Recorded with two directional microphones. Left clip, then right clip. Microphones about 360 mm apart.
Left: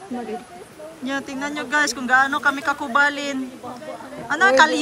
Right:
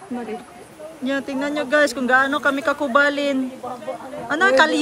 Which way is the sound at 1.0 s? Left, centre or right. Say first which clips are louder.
Right 3 dB; centre.